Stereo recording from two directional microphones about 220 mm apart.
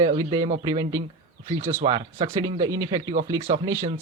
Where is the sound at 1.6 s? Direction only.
10° right (ahead or behind).